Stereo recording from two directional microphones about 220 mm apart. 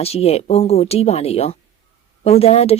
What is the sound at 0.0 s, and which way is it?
A woman's voice, 25° left (ahead or behind).